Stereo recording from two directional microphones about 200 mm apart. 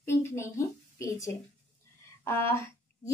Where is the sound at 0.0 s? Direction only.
15° left (ahead or behind).